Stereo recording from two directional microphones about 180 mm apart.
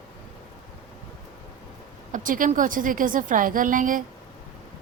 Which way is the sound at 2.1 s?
45° right (ahead or behind).